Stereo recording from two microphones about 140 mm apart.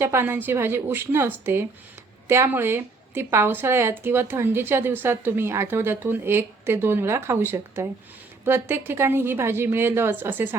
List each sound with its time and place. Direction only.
0.0 s a woman's voice: 15° right (ahead or behind)